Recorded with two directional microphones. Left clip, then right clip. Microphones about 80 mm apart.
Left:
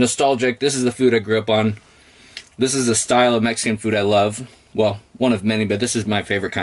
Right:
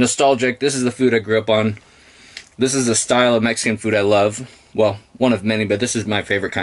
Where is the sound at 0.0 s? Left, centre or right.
Centre.